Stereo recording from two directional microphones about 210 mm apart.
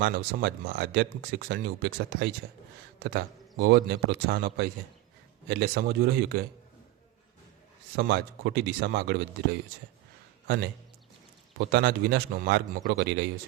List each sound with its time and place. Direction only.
0.0 s speech: 45° right (ahead or behind)
7.9 s a man's voice: 55° right (ahead or behind)